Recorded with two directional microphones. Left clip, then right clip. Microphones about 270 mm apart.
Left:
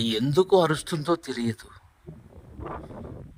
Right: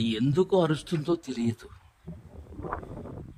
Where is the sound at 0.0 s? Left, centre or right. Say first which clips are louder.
Left 3 dB; centre.